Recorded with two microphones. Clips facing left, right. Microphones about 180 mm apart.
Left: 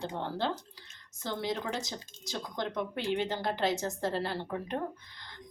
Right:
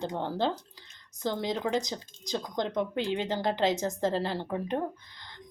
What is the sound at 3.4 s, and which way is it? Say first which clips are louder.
Speech: right 4 dB; 90° right.